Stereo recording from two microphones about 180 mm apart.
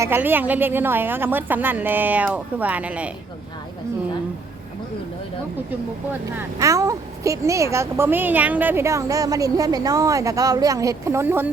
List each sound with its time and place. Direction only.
0.0 s speech: 10° right (ahead or behind)
6.1 s speech: 15° right (ahead or behind)